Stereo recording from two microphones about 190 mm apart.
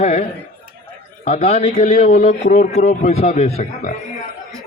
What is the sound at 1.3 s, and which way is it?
A man's voice, 35° left (ahead or behind).